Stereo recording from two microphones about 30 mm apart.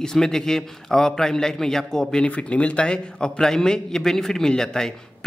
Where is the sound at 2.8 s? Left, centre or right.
Left.